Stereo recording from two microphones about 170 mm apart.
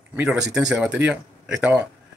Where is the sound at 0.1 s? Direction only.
5° right (ahead or behind).